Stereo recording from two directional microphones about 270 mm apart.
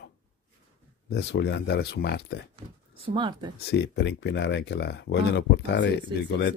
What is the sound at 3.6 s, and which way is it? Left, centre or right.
Speech, left.